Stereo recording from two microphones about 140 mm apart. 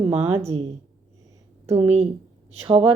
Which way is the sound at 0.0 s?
45° right (ahead or behind).